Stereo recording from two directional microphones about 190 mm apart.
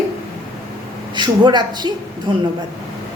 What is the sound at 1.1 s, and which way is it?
A woman's voice, 25° right (ahead or behind).